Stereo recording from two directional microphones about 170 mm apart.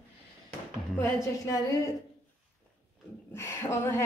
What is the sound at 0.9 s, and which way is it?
Speech, 20° left (ahead or behind).